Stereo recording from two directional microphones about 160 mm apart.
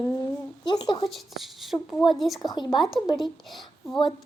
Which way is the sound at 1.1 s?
Centre (ahead or behind).